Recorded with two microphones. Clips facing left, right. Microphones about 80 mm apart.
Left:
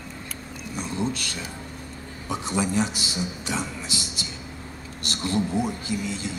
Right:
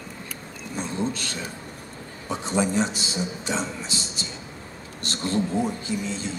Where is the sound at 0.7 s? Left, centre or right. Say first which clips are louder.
Right 1 dB; right.